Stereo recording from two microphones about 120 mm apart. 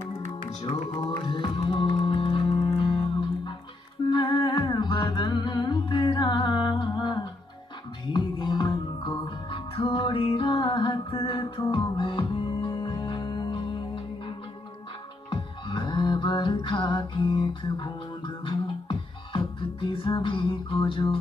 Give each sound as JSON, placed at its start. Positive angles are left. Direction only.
{"t": 0.7, "sound": "music", "side_deg": 40}
{"t": 11.6, "sound": "music", "side_deg": 35}